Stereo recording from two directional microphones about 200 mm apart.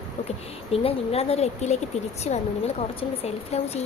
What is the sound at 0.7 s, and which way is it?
A woman's voice, 30° left (ahead or behind).